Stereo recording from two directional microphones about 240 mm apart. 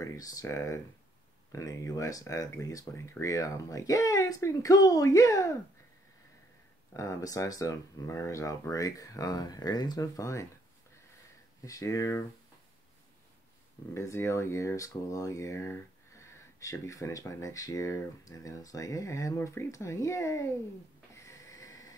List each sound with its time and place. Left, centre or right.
0.0 s speech: centre
6.9 s speech: centre
11.6 s speech: centre
13.9 s speech: centre
21.1 s a sound: centre